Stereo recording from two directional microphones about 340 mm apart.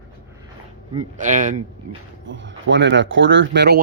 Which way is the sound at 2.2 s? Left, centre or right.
Right.